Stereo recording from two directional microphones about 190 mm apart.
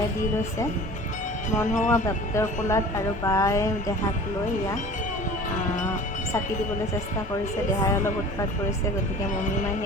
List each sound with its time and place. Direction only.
1.6 s speech: 40° left (ahead or behind)
1.9 s speech: 15° left (ahead or behind)